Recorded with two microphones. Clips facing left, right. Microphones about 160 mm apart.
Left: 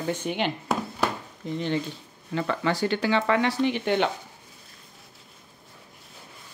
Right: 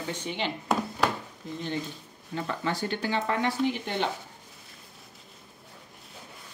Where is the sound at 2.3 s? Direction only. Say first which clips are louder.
Left 5 dB; 90° left; by 4.1 s 70° left (ahead or behind).